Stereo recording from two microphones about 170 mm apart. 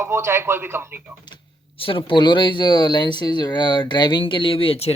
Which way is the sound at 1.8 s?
30° left (ahead or behind).